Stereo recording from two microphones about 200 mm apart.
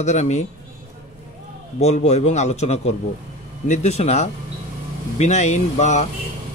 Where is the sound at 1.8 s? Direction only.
35° left (ahead or behind).